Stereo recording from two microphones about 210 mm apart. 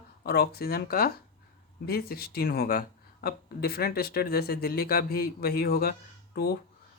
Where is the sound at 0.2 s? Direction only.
45° left (ahead or behind).